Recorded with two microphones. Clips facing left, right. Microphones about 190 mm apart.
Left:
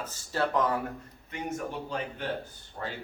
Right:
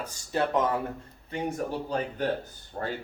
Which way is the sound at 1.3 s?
35° right (ahead or behind).